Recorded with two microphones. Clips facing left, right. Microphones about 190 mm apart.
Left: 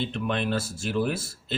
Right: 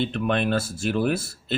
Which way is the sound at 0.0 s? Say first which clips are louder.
Right 4 dB; 60° right (ahead or behind).